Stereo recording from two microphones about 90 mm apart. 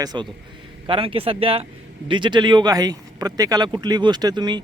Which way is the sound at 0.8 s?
85° right.